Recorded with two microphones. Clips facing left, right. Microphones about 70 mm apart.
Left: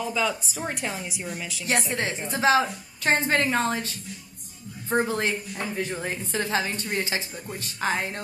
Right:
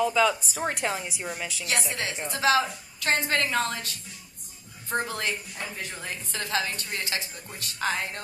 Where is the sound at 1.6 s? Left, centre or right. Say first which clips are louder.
Left 5 dB; left.